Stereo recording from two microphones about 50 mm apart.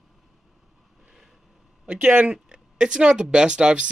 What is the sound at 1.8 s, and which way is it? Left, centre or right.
Speech, right.